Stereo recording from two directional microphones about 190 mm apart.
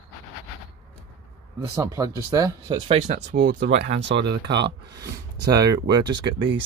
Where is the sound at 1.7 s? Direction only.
15° right (ahead or behind).